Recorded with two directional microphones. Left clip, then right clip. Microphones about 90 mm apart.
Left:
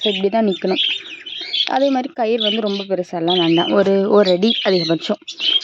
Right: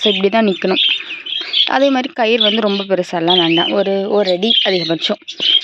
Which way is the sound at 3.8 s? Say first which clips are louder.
Left 1 dB; 45° left (ahead or behind).